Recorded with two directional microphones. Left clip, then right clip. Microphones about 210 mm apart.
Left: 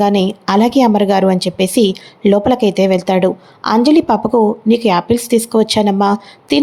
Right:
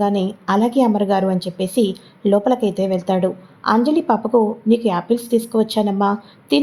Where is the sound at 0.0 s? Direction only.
25° left (ahead or behind).